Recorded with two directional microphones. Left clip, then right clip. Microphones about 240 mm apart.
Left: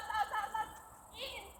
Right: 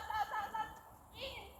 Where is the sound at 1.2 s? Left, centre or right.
Centre.